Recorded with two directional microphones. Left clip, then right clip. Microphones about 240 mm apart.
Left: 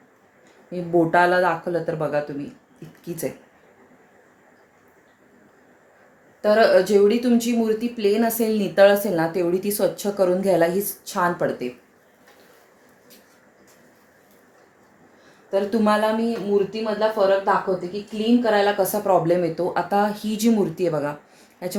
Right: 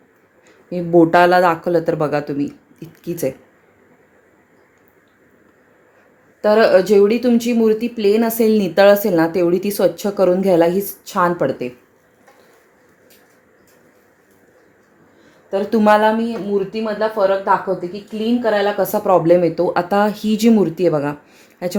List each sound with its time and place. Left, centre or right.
0.7 s speech: right
6.4 s speech: right
15.4 s speech: right
18.6 s speech: right